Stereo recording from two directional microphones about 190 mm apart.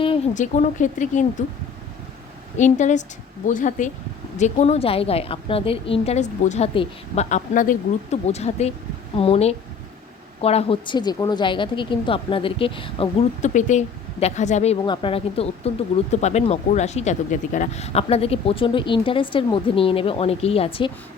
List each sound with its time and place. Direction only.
0.3 s a woman's voice: 40° left (ahead or behind)
2.6 s a woman's voice: 40° left (ahead or behind)